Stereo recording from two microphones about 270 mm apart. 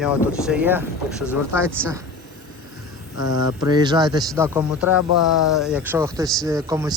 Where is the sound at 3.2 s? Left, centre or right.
Left.